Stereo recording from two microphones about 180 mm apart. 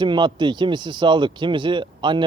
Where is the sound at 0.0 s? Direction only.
25° right (ahead or behind).